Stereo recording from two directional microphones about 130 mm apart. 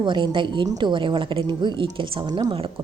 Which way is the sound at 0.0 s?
35° right (ahead or behind).